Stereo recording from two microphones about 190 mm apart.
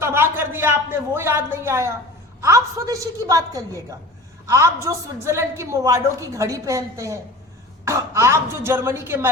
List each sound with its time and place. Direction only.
0.0 s a woman's voice: 10° right (ahead or behind)